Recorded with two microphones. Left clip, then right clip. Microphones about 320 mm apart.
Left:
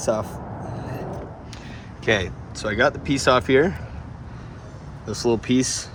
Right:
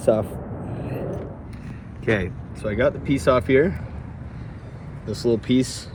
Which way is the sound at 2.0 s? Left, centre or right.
Centre.